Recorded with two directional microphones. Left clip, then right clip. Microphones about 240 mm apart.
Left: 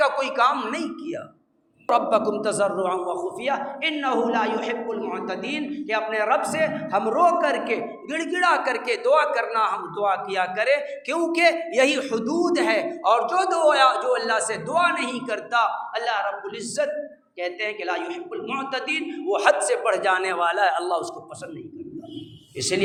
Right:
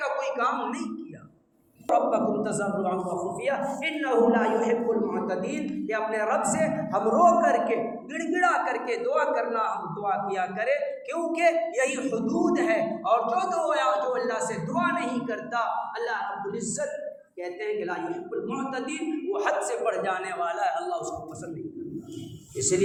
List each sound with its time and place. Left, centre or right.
0.0 s a man's voice: left
1.9 s a man's voice: left
17.4 s a man's voice: left